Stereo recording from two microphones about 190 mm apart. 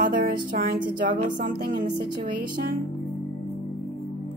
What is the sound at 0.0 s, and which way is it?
Speech, 50° right (ahead or behind).